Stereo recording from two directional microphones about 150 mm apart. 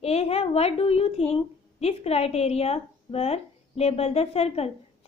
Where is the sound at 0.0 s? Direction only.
40° left (ahead or behind).